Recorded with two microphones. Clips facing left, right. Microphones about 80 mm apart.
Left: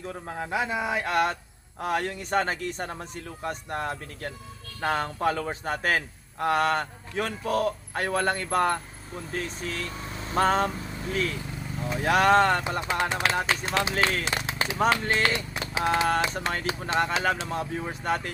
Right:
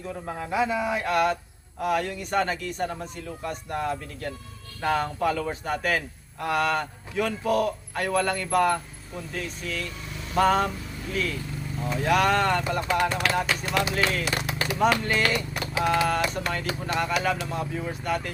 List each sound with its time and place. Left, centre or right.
0.5 s speech: left
12.6 s speech: left